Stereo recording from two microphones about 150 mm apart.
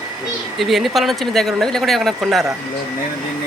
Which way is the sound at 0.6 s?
Centre (ahead or behind).